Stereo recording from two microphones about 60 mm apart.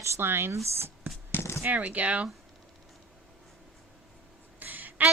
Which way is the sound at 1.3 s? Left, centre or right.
Left.